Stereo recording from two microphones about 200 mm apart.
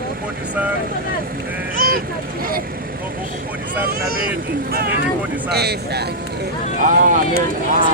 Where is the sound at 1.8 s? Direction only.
45° right (ahead or behind).